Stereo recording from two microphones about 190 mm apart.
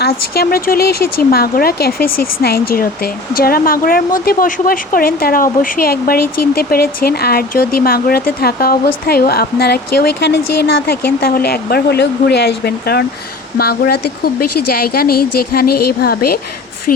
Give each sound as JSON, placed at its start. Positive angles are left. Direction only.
{"t": 0.3, "sound": "speech", "side_deg": 55}